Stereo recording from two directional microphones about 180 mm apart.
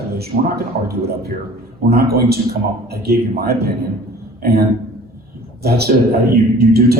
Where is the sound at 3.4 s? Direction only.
60° right (ahead or behind).